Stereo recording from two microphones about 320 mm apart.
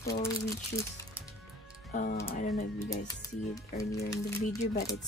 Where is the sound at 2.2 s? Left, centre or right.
Left.